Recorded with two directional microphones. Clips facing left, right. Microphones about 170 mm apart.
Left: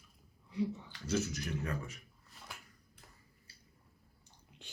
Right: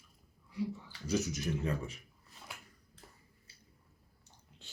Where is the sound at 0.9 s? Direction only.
15° right (ahead or behind).